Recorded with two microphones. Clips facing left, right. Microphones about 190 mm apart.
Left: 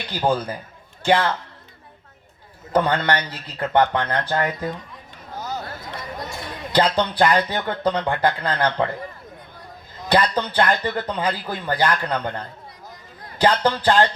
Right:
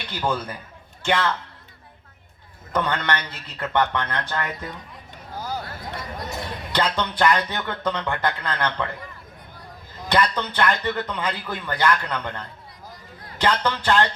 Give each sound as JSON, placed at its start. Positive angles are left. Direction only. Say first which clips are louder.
{"t": 0.1, "sound": "speech", "louder": "left 4 dB", "side_deg": 35}
{"t": 2.7, "sound": "speech", "louder": "left 5 dB", "side_deg": 35}
{"t": 6.7, "sound": "speech", "louder": "left 5 dB", "side_deg": 35}
{"t": 10.1, "sound": "speech", "louder": "left 3 dB", "side_deg": 35}